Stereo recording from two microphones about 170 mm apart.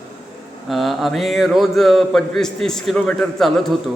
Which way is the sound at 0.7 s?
Centre (ahead or behind).